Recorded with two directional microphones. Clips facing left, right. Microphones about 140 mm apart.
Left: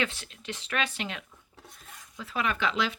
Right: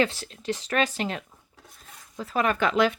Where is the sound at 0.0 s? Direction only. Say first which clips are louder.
Right 7 dB; 35° right (ahead or behind).